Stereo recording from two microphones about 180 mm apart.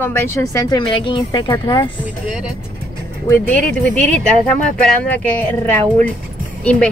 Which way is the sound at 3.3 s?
10° left (ahead or behind).